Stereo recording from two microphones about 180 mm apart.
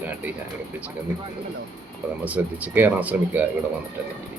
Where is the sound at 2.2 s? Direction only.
10° right (ahead or behind).